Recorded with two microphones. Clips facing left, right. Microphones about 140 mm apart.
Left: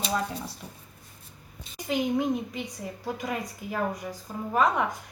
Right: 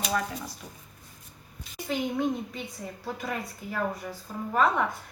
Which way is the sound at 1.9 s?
15° left (ahead or behind).